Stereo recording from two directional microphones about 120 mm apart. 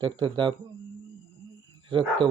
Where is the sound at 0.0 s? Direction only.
40° right (ahead or behind).